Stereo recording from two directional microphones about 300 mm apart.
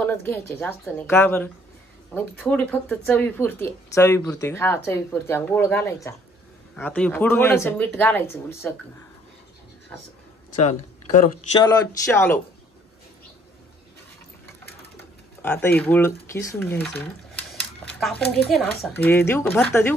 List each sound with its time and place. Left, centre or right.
0.0 s speech: centre
10.6 s speech: left
11.6 s speech: centre
15.4 s speech: centre
18.0 s speech: centre